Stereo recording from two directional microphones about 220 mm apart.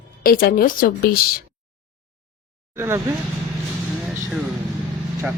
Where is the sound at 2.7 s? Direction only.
10° right (ahead or behind).